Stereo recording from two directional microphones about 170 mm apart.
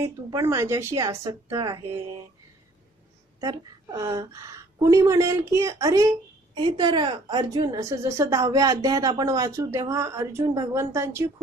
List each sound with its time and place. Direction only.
0.0 s a woman's voice: 20° right (ahead or behind)
3.3 s a woman's voice: 20° right (ahead or behind)